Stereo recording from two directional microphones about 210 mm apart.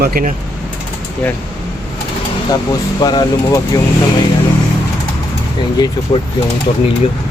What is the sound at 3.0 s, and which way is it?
Speech, 20° left (ahead or behind).